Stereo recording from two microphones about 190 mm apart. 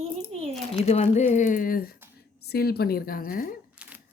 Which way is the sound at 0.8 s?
35° left (ahead or behind).